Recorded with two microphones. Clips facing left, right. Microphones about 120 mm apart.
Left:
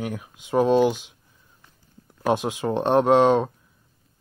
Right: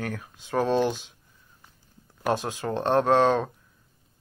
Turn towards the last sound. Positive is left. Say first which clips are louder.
# left 4 dB
turn(degrees=15)  # may be behind; listen again after turning